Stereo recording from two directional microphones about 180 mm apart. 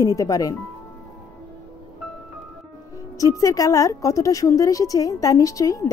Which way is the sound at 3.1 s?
20° left (ahead or behind).